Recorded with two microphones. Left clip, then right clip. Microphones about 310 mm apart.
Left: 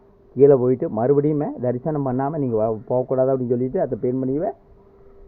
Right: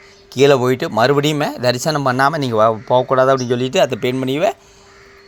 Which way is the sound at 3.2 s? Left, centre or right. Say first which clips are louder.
Right 6 dB; right.